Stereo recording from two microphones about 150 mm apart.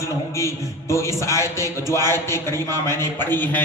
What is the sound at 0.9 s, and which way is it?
A man's voice, 20° left (ahead or behind).